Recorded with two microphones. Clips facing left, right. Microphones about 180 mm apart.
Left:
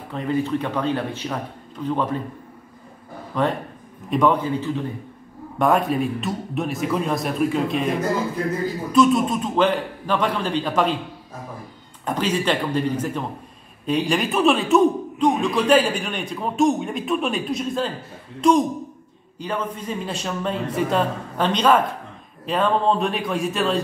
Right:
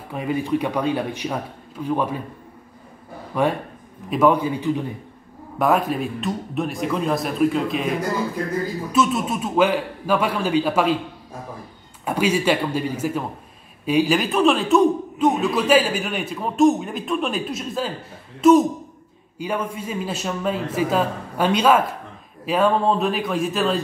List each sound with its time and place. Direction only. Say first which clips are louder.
0.1 s a man's voice: even; 10° right (ahead or behind)
3.3 s a man's voice: right 1 dB; 10° right (ahead or behind)
5.6 s a man's voice: left 1 dB; centre (ahead or behind)
8.9 s a man's voice: left 4 dB; 5° right (ahead or behind)
12.0 s a man's voice: right 2 dB; 10° right (ahead or behind)